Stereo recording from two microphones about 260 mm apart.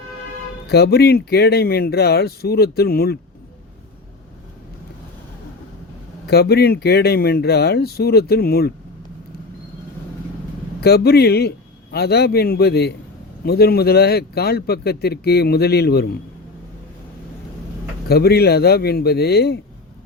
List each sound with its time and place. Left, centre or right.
0.7 s speech: left
6.2 s speech: left
10.8 s speech: left
18.1 s speech: left